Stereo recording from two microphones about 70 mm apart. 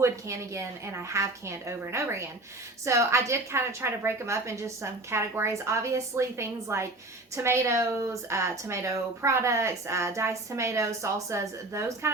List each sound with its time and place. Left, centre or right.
0.0 s a woman's voice: right